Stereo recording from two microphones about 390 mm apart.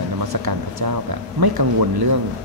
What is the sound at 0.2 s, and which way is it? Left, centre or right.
Speech, right.